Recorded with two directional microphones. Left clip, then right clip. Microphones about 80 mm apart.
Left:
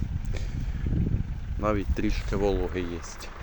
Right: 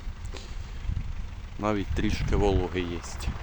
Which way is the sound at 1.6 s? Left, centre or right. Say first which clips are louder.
Left 1 dB; centre.